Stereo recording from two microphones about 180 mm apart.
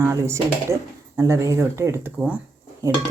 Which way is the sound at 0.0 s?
15° right (ahead or behind).